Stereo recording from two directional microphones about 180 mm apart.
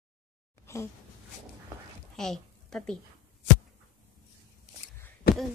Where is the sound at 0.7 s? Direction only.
15° left (ahead or behind).